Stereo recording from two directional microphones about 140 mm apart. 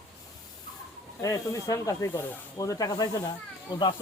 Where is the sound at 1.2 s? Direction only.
25° left (ahead or behind).